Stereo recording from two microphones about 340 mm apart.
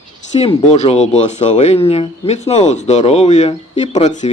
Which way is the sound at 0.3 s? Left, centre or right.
Centre.